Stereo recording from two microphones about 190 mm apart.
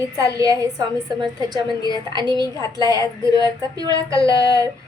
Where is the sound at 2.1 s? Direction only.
25° right (ahead or behind).